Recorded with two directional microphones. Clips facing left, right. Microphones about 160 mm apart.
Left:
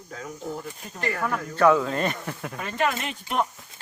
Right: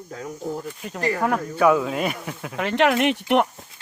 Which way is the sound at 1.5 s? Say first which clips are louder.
Even; 10° right (ahead or behind).